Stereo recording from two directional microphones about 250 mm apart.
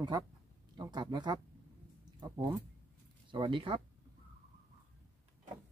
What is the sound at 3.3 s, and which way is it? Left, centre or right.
Speech, centre.